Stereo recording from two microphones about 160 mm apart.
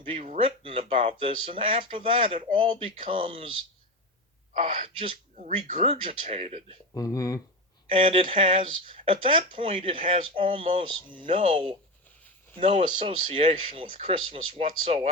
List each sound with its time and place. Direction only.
0.0 s a sound: 35° right (ahead or behind)
1.2 s speech: 35° right (ahead or behind)
4.6 s speech: 35° right (ahead or behind)
6.9 s speech: 20° left (ahead or behind)
7.9 s speech: 35° right (ahead or behind)